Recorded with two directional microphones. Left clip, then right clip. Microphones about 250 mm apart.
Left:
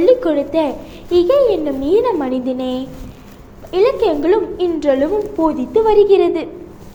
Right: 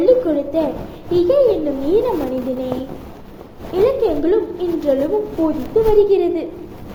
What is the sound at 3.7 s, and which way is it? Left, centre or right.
A woman's voice, left.